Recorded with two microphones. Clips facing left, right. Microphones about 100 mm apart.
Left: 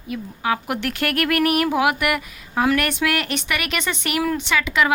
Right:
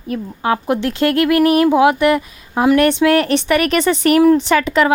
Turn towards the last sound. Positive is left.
turn(degrees=-40)  # may be behind; listen again after turning